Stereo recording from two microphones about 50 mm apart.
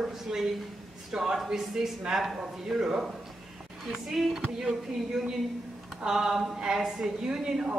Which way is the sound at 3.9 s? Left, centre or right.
Centre.